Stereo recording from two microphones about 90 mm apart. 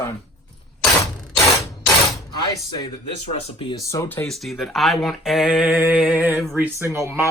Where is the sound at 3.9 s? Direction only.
40° left (ahead or behind).